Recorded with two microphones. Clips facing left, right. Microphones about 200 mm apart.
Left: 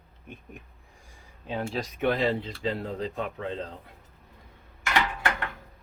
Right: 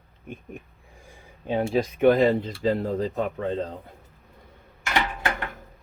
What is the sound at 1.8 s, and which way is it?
Speech, 50° right (ahead or behind).